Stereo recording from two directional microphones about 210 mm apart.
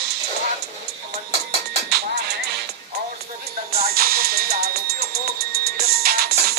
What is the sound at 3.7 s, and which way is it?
Music, 45° right (ahead or behind).